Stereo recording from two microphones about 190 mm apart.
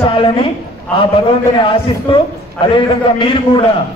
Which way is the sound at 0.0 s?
25° left (ahead or behind).